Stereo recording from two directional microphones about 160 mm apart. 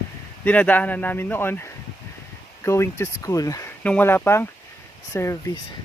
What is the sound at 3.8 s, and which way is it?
Speech, 10° left (ahead or behind).